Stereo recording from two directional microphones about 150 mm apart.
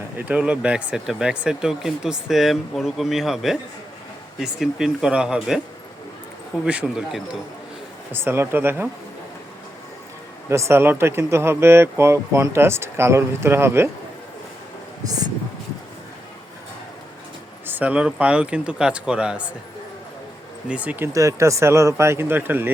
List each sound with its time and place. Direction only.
0.2 s speech: 10° right (ahead or behind)
6.7 s speech: 5° right (ahead or behind)
8.1 s speech: 15° right (ahead or behind)
10.5 s speech: 20° right (ahead or behind)
17.7 s speech: 10° right (ahead or behind)
20.7 s speech: 10° right (ahead or behind)